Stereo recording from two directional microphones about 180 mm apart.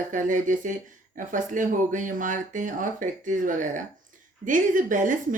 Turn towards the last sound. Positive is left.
turn(degrees=-45)  # may be behind; listen again after turning